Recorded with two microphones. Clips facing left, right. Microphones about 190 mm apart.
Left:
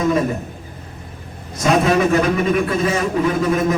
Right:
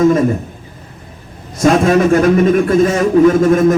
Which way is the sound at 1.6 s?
50° right (ahead or behind).